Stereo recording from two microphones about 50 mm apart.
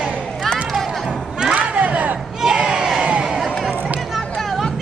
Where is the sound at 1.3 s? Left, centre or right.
Centre.